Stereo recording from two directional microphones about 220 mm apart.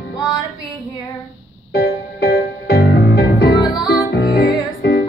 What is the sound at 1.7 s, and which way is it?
Music, 45° left (ahead or behind).